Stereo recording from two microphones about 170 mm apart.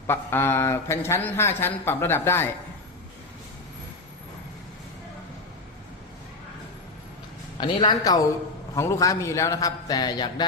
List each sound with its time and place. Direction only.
0.1 s speech: 15° left (ahead or behind)
7.6 s a man's voice: 25° left (ahead or behind)